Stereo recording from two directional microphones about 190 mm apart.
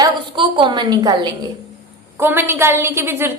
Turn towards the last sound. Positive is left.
turn(degrees=-10)  # may be behind; listen again after turning